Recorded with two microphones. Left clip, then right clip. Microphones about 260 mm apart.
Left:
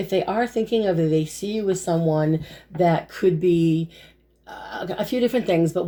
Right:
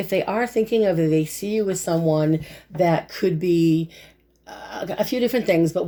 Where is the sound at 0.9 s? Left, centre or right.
Right.